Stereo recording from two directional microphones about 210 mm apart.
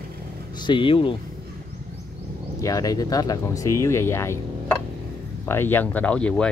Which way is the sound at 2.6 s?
15° left (ahead or behind).